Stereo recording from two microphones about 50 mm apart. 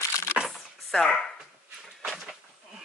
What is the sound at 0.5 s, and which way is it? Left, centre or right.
Chopping, centre.